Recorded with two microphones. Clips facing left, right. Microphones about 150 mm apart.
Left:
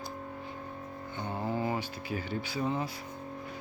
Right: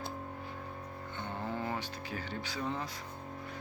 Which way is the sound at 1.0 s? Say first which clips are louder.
Left 5 dB; 10° left (ahead or behind).